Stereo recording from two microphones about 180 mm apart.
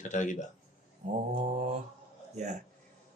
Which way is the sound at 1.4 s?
40° right (ahead or behind).